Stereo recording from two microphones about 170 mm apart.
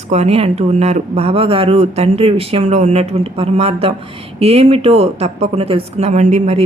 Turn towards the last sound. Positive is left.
turn(degrees=-45)  # may be behind; listen again after turning